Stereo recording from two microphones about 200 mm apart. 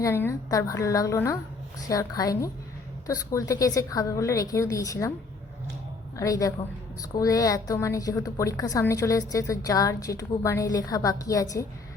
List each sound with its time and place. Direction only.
0.0 s a woman's voice: 10° left (ahead or behind)
6.1 s a woman's voice: 15° left (ahead or behind)